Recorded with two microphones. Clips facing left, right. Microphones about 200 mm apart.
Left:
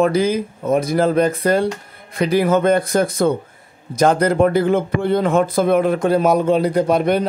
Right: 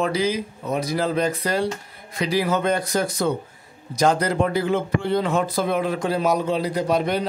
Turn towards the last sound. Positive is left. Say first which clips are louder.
# left 6 dB
turn(degrees=55)  # may be behind; listen again after turning